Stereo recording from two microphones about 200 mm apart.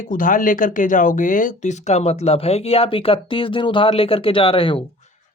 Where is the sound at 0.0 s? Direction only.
40° left (ahead or behind); by 4.8 s 25° left (ahead or behind).